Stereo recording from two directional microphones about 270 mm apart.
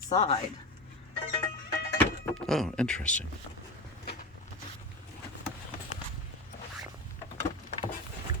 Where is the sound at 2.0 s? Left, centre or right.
Centre.